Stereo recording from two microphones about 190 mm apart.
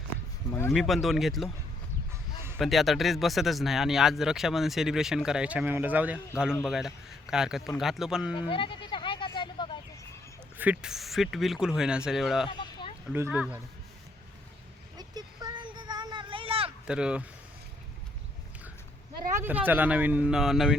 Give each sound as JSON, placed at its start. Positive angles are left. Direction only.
{"t": 0.7, "sound": "speech", "side_deg": 0}
{"t": 2.6, "sound": "speech", "side_deg": 0}
{"t": 8.3, "sound": "sheep", "side_deg": 25}
{"t": 10.6, "sound": "speech", "side_deg": -5}
{"t": 12.5, "sound": "sheep", "side_deg": 25}
{"t": 13.1, "sound": "speech", "side_deg": -10}
{"t": 14.9, "sound": "a sound", "side_deg": -20}
{"t": 16.8, "sound": "speech", "side_deg": -5}
{"t": 19.4, "sound": "speech", "side_deg": -10}